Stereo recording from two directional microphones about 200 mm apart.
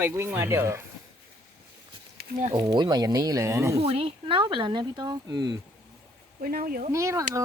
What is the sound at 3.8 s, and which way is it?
Speech, 30° right (ahead or behind).